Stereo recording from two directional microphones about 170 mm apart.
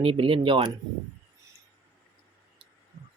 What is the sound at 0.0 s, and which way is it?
Speech, 30° right (ahead or behind).